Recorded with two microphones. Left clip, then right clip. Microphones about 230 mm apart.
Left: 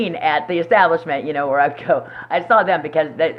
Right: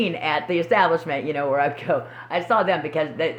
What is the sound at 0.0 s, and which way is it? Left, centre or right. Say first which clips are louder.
Speech: left 5 dB; right.